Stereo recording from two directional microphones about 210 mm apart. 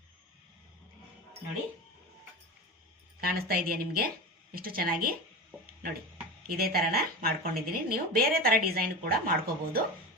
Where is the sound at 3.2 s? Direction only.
45° right (ahead or behind).